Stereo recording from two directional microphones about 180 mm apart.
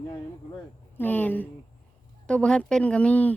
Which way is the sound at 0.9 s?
10° left (ahead or behind).